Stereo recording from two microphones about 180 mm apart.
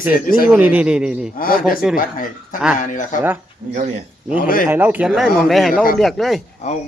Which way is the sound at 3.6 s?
45° right (ahead or behind).